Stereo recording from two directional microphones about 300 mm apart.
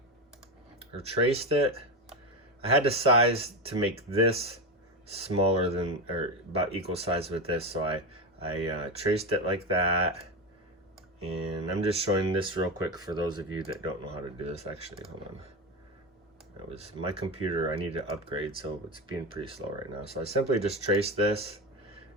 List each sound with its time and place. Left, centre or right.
0.8 s speech: centre
11.8 s speech: centre
16.7 s speech: centre